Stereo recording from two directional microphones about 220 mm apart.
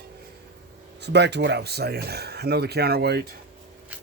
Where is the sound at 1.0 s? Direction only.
50° right (ahead or behind).